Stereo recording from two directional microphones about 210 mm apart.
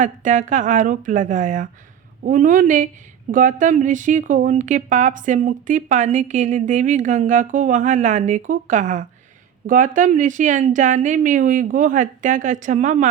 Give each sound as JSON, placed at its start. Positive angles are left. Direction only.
{"t": 0.0, "sound": "a woman's voice", "side_deg": -35}